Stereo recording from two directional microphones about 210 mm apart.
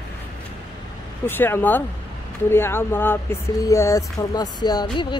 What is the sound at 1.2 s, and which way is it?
Speech, 10° left (ahead or behind).